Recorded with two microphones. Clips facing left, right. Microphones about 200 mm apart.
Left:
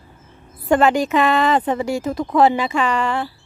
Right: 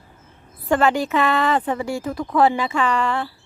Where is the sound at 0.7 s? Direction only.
20° left (ahead or behind).